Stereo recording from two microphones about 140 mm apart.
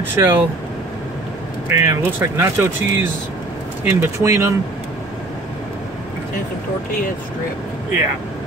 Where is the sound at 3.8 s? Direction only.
20° right (ahead or behind).